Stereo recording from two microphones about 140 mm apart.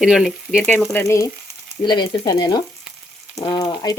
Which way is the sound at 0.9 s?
15° left (ahead or behind).